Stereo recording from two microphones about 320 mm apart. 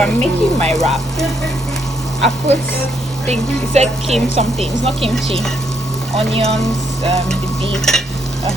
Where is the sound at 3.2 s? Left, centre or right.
Right.